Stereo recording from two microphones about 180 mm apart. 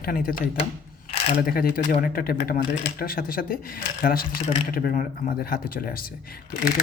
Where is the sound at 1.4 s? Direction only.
55° left (ahead or behind).